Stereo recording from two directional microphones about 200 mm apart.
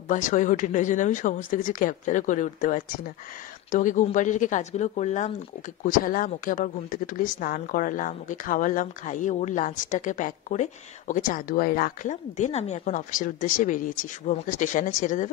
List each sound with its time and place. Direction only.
0.1 s speech: 40° left (ahead or behind)